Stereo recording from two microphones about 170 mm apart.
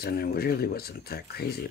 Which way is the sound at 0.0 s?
65° left (ahead or behind).